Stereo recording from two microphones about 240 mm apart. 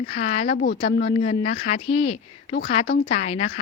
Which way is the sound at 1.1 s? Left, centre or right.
Left.